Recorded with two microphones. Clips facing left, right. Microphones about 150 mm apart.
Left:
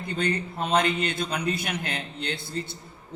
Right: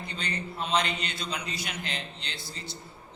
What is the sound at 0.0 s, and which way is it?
A man's voice, 50° left (ahead or behind).